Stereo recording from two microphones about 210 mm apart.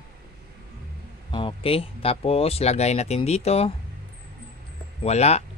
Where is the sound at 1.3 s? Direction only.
25° left (ahead or behind).